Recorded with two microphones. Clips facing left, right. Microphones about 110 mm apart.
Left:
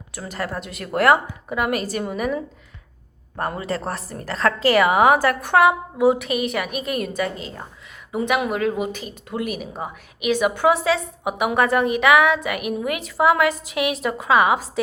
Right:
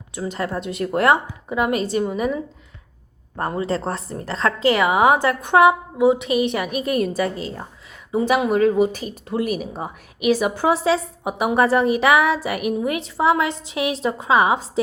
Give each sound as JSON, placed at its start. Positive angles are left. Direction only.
{"t": 0.1, "sound": "a woman's voice", "side_deg": -25}